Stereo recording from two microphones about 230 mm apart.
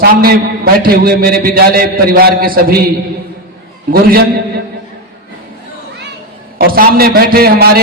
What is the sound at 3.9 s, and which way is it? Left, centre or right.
Speech, right.